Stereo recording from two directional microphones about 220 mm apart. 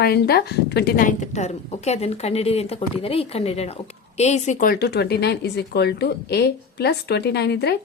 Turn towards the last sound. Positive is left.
turn(degrees=50)  # may be behind; listen again after turning